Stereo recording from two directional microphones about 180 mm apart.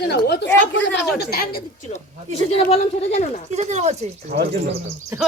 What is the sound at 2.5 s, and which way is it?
Speech, 35° left (ahead or behind).